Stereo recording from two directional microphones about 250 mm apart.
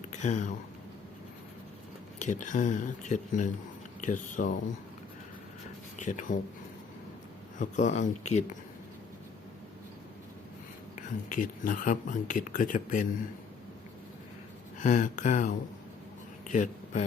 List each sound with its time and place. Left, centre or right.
0.1 s speech: left
2.1 s speech: left
6.0 s speech: left
7.6 s speech: left
11.3 s speech: left
14.8 s speech: left